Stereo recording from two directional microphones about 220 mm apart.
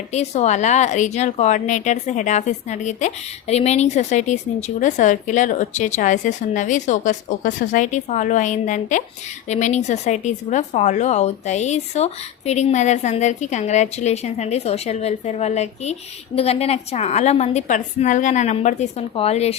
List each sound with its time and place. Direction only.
0.1 s a woman's voice: 30° left (ahead or behind)